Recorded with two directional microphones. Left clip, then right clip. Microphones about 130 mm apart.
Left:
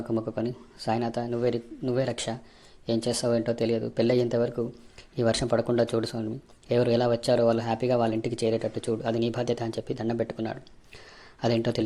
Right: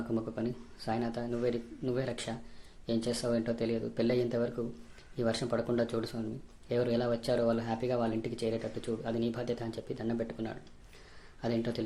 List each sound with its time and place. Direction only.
0.1 s speech: 35° left (ahead or behind)